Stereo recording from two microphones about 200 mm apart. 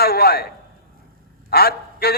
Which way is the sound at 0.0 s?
50° left (ahead or behind).